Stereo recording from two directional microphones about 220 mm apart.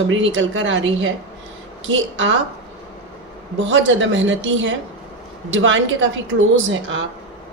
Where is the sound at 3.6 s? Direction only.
60° right (ahead or behind).